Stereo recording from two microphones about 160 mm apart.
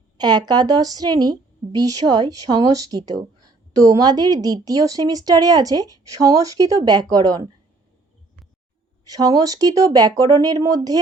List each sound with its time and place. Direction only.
0.2 s a woman's voice: 25° right (ahead or behind)
9.0 s a woman's voice: 25° right (ahead or behind)